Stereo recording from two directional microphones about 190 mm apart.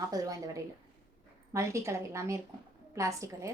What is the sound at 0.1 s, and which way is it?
A woman's voice, 20° right (ahead or behind).